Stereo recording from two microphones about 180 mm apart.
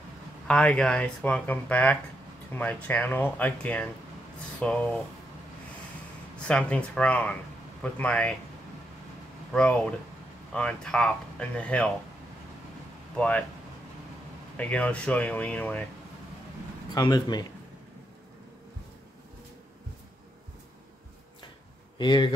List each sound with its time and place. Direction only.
0.5 s speech: 5° left (ahead or behind)
6.4 s speech: 5° left (ahead or behind)
9.5 s speech: 5° left (ahead or behind)
14.6 s speech: 5° left (ahead or behind)
16.9 s a man's voice: 20° left (ahead or behind)
21.9 s speech: 25° left (ahead or behind)